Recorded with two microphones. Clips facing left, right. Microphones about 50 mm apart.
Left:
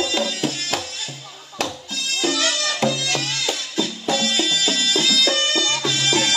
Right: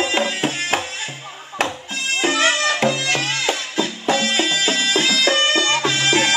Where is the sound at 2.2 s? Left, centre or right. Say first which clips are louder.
Right 5 dB; right.